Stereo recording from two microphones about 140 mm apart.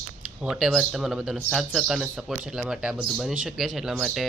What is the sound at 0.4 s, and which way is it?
Speech, 5° right (ahead or behind).